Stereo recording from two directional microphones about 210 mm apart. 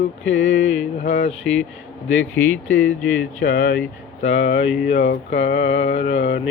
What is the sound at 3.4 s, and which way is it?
Mantra, 40° left (ahead or behind).